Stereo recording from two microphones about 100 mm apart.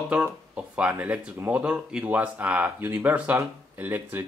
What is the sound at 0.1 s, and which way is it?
Speech, 15° right (ahead or behind).